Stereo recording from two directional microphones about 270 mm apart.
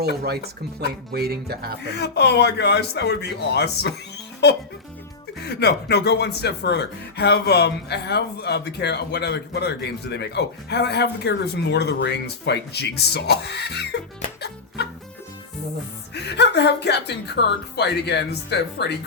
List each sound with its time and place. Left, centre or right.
0.0 s speech: right
2.0 s speech: left
5.4 s speech: left
16.1 s speech: left